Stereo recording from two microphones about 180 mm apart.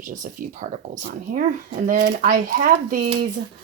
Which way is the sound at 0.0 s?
45° right (ahead or behind).